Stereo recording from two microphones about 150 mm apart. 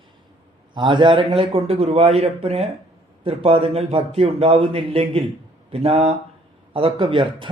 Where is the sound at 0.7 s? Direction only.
30° right (ahead or behind).